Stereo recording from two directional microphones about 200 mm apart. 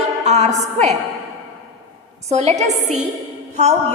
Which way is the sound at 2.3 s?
35° right (ahead or behind).